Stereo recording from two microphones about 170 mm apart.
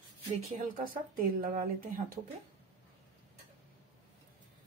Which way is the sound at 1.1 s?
55° right (ahead or behind).